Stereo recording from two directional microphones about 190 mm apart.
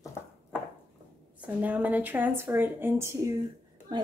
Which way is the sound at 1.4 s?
10° right (ahead or behind).